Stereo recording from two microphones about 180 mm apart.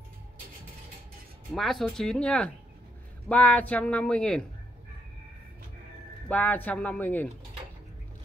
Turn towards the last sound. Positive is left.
turn(degrees=10)  # may be behind; listen again after turning